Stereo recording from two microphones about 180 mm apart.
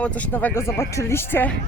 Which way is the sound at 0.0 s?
5° left (ahead or behind).